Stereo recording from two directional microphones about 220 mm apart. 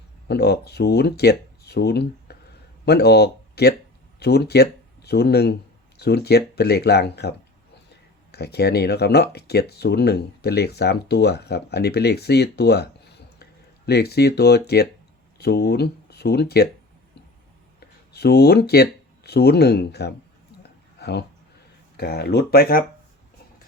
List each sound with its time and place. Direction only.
0.3 s speech: 50° left (ahead or behind)
17.7 s speech: 45° left (ahead or behind)